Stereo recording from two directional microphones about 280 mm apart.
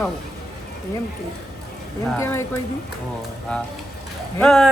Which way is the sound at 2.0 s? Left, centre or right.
Centre.